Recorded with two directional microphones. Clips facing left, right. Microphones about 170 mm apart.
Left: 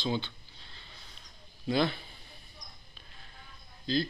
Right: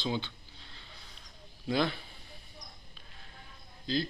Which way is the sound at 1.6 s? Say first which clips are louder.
Left 2 dB; centre (ahead or behind).